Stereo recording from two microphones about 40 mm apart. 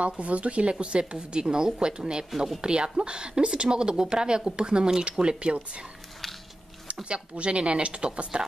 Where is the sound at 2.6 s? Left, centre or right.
Right.